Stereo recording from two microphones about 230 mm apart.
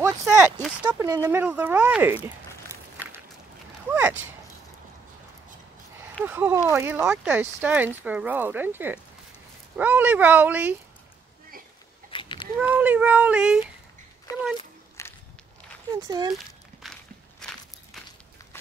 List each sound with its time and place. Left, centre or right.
0.0 s a sound: centre
0.8 s speech: centre
3.9 s speech: centre
6.2 s speech: centre
12.1 s a sound: left
12.5 s speech: centre
14.6 s a sound: centre
16.1 s speech: centre
16.8 s walk: centre